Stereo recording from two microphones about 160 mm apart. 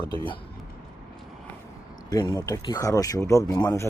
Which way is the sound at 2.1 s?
20° left (ahead or behind).